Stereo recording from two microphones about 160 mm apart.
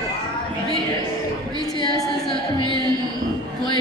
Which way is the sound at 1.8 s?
30° left (ahead or behind).